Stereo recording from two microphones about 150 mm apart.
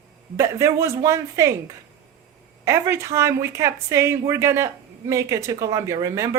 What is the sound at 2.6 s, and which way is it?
Speech, 20° right (ahead or behind).